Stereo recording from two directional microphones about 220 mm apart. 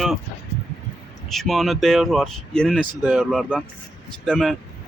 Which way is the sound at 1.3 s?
Centre (ahead or behind).